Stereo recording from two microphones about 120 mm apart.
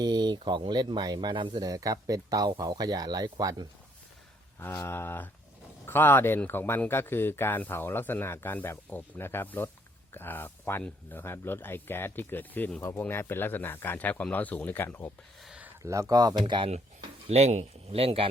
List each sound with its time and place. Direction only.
0.0 s speech: 35° right (ahead or behind)
4.6 s a sound: 20° left (ahead or behind)
5.8 s speech: 20° left (ahead or behind)
15.4 s a sound: 10° right (ahead or behind)
15.8 s speech: 25° right (ahead or behind)
17.2 s speech: 65° right (ahead or behind)